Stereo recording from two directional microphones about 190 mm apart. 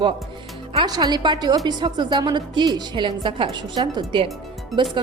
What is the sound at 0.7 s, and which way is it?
A woman's voice, 25° right (ahead or behind).